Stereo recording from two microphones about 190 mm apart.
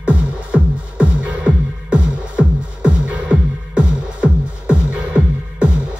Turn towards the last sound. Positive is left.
turn(degrees=-5)  # may be behind; listen again after turning